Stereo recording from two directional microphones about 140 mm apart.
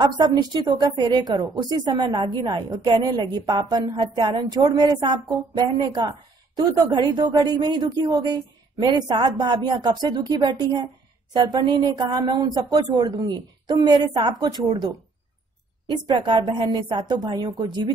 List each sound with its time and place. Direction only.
0.0 s a woman's voice: 30° right (ahead or behind)
16.1 s a woman's voice: 35° right (ahead or behind)